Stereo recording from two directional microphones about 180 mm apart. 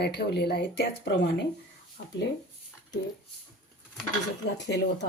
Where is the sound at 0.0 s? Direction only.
65° left (ahead or behind).